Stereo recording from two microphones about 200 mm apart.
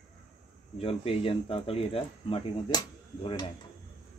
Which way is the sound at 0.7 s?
30° left (ahead or behind).